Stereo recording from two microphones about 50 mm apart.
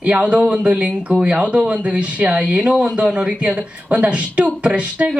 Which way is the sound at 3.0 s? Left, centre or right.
Right.